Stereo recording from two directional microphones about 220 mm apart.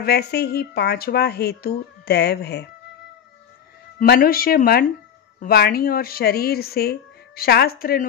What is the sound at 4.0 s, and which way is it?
Speech, 40° left (ahead or behind).